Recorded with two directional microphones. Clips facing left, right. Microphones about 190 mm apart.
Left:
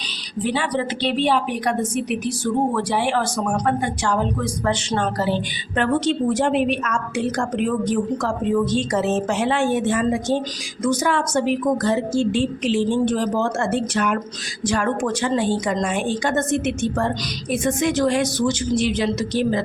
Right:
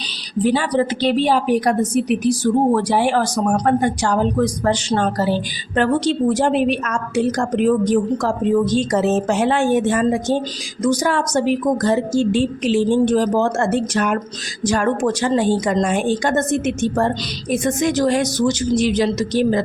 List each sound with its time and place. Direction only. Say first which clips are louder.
0.4 s a woman's voice: right 5 dB; 40° right (ahead or behind)